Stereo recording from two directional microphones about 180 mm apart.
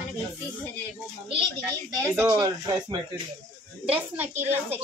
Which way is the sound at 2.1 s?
10° right (ahead or behind).